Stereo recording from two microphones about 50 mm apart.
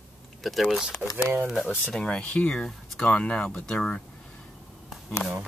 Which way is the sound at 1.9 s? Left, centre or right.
Left.